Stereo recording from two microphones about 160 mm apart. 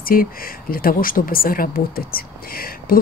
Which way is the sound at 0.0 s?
65° left (ahead or behind).